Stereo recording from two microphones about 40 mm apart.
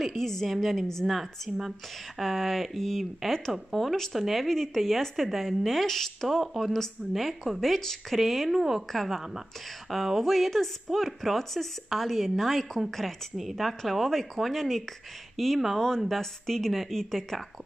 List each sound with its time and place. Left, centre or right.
0.0 s a woman's voice: centre
6.4 s a woman's voice: centre
8.9 s a woman's voice: centre